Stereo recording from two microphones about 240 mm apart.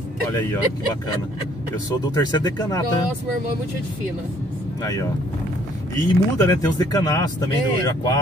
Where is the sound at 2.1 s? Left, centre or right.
Centre.